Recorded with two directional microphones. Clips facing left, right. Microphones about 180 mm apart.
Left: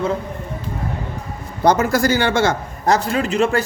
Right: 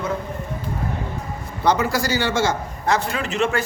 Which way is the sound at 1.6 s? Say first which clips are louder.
Left 4 dB; 45° left (ahead or behind).